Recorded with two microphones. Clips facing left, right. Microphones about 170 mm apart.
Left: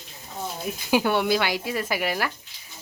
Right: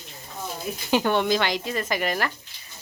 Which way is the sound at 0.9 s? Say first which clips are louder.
Even; 10° left (ahead or behind).